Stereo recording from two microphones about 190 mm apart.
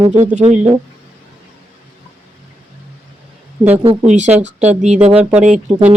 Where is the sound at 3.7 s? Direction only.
30° right (ahead or behind).